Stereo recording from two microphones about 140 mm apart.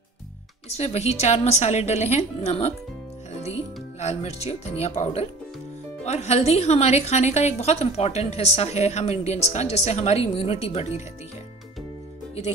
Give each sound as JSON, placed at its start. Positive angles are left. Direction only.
{"t": 0.7, "sound": "a woman's voice", "side_deg": 50}
{"t": 4.0, "sound": "a woman's voice", "side_deg": 50}